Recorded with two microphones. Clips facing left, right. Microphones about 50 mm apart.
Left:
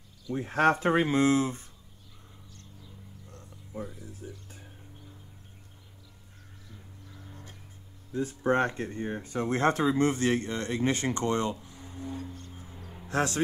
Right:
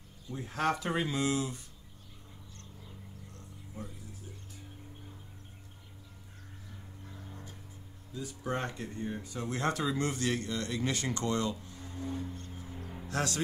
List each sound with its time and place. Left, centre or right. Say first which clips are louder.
0.3 s speech: left 7 dB; left
3.3 s a sound: left 1 dB; left
8.1 s speech: left 9 dB; left
11.6 s music: even; left
12.3 s music: even; right
13.1 s a man's voice: left 5 dB; left